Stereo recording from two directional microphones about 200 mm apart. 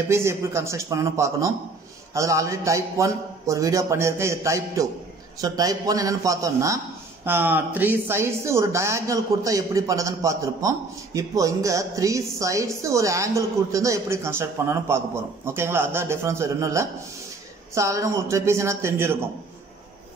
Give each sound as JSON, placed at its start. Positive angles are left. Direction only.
{"t": 0.1, "sound": "speech", "side_deg": -15}